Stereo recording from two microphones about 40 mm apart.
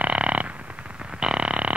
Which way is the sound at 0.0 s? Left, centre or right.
Right.